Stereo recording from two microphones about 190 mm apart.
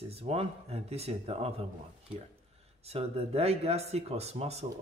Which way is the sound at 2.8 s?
35° right (ahead or behind).